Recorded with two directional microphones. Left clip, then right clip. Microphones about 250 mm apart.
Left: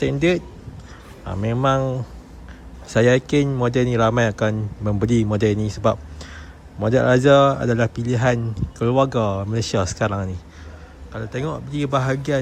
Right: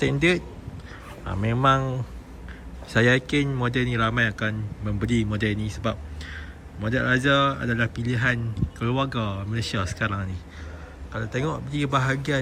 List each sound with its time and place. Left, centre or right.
0.0 s a man's voice: centre